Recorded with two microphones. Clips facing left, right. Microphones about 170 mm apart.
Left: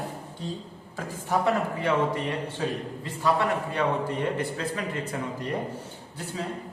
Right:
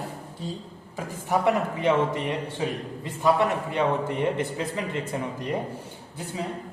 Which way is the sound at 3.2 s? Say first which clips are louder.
Right 3 dB; 20° right (ahead or behind).